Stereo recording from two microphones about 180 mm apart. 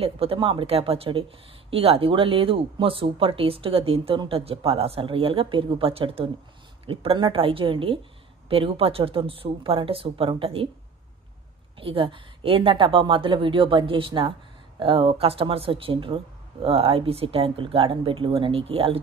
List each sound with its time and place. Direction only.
0.0 s a woman's voice: 30° right (ahead or behind)
11.8 s a woman's voice: 30° right (ahead or behind)